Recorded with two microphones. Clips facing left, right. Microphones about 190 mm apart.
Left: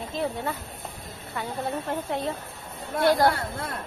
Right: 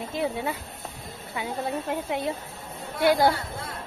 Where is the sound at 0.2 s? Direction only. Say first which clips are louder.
Right 1 dB; 10° right (ahead or behind).